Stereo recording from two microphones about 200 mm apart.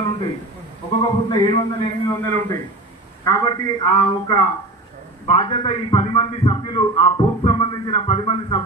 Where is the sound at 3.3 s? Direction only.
20° left (ahead or behind).